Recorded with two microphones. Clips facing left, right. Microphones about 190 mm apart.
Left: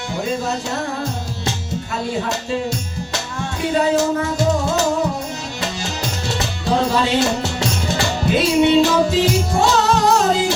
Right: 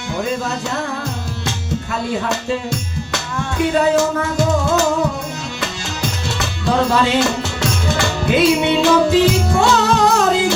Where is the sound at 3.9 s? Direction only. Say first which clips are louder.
Right 1 dB; 50° right (ahead or behind).